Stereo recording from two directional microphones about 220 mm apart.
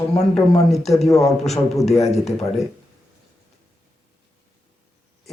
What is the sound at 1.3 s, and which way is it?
Speech, centre (ahead or behind).